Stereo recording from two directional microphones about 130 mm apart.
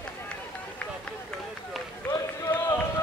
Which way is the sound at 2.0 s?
20° left (ahead or behind).